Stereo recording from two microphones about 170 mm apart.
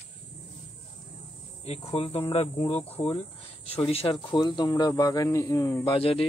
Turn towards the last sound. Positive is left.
turn(degrees=35)  # may be behind; listen again after turning